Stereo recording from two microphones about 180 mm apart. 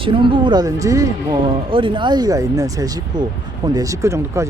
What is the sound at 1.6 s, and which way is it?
Speech, 30° right (ahead or behind).